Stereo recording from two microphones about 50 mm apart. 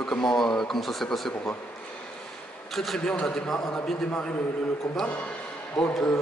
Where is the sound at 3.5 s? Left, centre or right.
Left.